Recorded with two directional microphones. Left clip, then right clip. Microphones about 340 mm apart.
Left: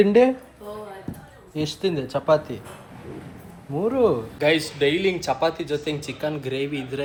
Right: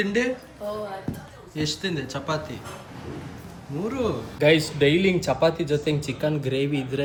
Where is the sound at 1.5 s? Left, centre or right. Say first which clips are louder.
Left 3 dB; centre.